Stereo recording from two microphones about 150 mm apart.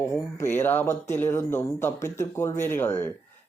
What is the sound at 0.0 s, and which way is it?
Speech, 20° left (ahead or behind).